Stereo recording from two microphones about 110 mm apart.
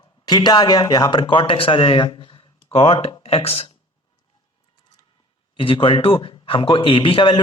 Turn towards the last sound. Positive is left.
turn(degrees=50)  # may be behind; listen again after turning